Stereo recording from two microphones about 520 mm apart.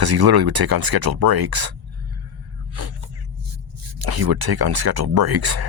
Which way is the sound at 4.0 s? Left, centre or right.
Right.